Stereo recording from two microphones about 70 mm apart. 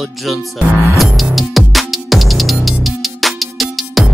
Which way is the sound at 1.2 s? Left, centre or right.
Centre.